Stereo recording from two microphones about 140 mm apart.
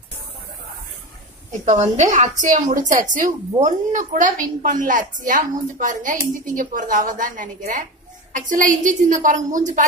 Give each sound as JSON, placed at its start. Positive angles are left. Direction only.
{"t": 1.5, "sound": "a woman's voice", "side_deg": -60}